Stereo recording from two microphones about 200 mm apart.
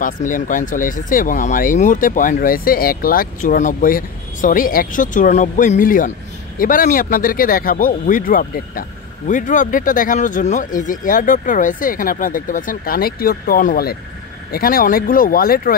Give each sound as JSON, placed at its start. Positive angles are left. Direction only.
{"t": 0.0, "sound": "speech", "side_deg": 40}